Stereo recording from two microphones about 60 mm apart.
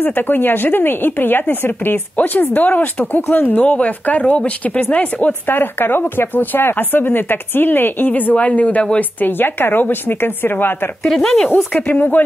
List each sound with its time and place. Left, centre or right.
0.0 s a woman's voice: left
9.2 s a woman's voice: left
11.0 s speech: centre
11.5 s speech: left